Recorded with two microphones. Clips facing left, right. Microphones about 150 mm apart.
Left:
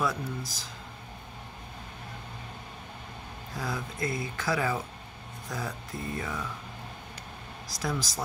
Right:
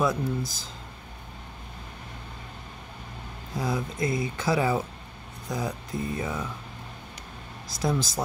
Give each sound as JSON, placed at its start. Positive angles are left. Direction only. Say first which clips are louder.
{"t": 0.0, "sound": "speech", "louder": "right 5 dB", "side_deg": -25}
{"t": 3.5, "sound": "speech", "louder": "right 6 dB", "side_deg": -20}
{"t": 7.6, "sound": "speech", "louder": "right 6 dB", "side_deg": -20}